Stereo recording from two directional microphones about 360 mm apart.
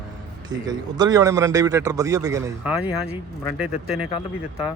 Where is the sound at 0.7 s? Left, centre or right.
Centre.